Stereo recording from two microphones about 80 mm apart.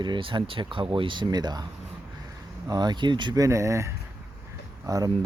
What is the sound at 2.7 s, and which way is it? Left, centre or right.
Speech, right.